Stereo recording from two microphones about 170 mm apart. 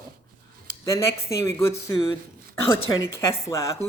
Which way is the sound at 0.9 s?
15° left (ahead or behind).